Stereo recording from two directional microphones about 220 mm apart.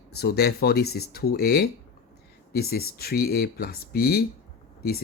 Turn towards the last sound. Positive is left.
turn(degrees=45)  # may be behind; listen again after turning